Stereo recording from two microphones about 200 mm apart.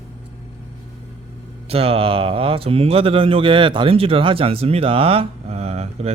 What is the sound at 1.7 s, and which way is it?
Speech, 30° right (ahead or behind).